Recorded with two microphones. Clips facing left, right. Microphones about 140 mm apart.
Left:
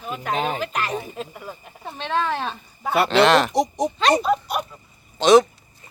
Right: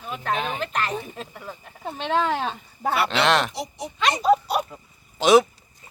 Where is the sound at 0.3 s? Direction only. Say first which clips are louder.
Left 8 dB; 40° left (ahead or behind).